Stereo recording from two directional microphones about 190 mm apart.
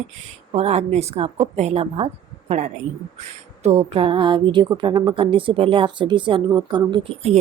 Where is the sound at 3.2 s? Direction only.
35° right (ahead or behind).